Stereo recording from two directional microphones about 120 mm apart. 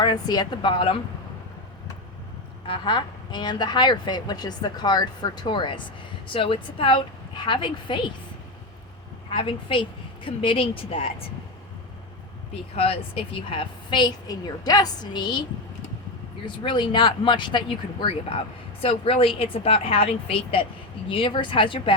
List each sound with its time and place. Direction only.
0.0 s a woman's voice: 35° left (ahead or behind)
2.6 s a woman's voice: 40° left (ahead or behind)
9.3 s speech: 50° left (ahead or behind)
12.7 s a woman's voice: 55° left (ahead or behind)
16.6 s speech: 40° left (ahead or behind)